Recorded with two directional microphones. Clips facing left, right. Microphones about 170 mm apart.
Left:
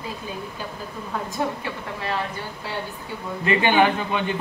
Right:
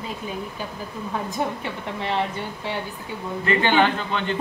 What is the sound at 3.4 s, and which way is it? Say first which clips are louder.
Speech: left 1 dB; 15° left (ahead or behind).